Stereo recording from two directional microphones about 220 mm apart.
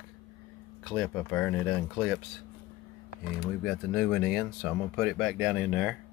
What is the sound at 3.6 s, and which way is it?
Speech, centre (ahead or behind).